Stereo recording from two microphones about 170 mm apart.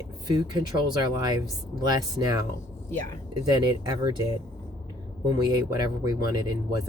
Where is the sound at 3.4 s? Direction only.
25° right (ahead or behind).